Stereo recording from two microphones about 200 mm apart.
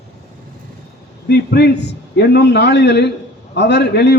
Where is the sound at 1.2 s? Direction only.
55° left (ahead or behind).